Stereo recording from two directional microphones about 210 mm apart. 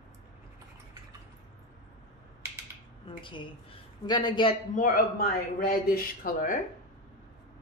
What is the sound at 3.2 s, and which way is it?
A man's voice, 25° left (ahead or behind).